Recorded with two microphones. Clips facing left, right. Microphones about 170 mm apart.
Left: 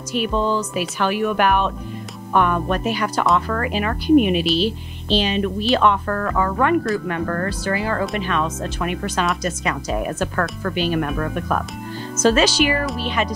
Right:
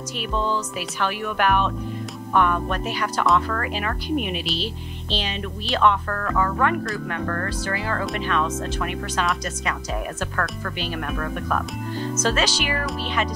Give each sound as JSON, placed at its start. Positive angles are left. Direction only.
{"t": 1.0, "sound": "speech", "side_deg": 15}
{"t": 11.1, "sound": "speech", "side_deg": 25}
{"t": 12.2, "sound": "speech", "side_deg": 10}